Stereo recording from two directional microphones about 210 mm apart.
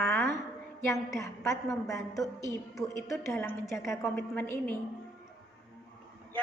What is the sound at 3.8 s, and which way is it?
Speech, centre (ahead or behind).